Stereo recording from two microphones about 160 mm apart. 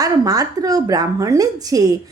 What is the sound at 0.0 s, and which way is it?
A woman's voice, 20° right (ahead or behind).